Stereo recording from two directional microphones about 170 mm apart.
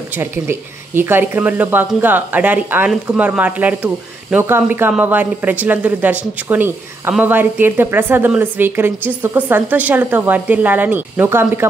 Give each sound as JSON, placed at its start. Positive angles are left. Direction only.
{"t": 0.1, "sound": "speech", "side_deg": -15}